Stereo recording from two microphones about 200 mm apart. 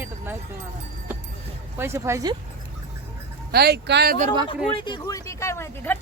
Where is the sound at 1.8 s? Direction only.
10° right (ahead or behind).